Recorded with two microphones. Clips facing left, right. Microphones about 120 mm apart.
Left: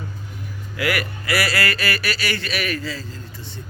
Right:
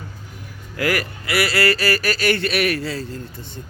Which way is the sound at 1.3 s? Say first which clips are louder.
Right 3 dB; 25° right (ahead or behind).